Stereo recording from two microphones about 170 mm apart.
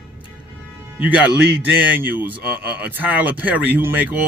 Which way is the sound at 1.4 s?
70° right (ahead or behind).